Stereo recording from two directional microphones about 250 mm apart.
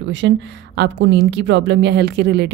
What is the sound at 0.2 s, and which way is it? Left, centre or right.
Speech, right.